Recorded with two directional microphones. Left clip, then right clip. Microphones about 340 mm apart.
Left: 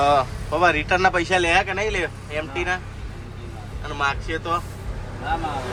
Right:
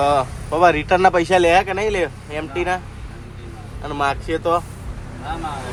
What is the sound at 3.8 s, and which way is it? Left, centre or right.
Speech, centre.